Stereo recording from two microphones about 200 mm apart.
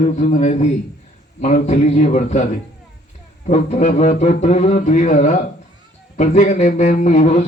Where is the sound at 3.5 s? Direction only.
35° left (ahead or behind).